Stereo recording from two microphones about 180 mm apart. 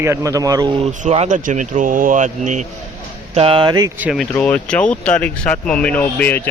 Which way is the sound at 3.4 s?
30° right (ahead or behind).